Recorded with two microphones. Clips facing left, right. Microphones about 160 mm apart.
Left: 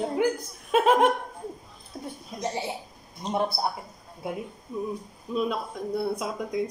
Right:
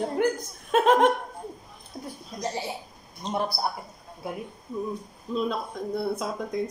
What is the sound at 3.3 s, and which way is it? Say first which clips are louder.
Speech: left 1 dB; 20° left (ahead or behind).